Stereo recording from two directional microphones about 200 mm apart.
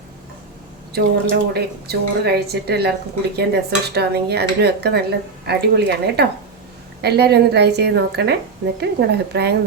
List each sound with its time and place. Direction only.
0.9 s a woman's voice: 50° right (ahead or behind)